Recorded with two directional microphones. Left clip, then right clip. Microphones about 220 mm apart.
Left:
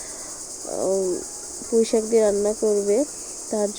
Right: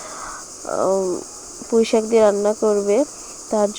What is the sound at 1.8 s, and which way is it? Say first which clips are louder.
Speech: right 4 dB; 20° right (ahead or behind).